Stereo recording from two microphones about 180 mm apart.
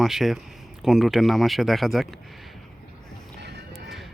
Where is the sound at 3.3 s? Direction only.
70° right (ahead or behind).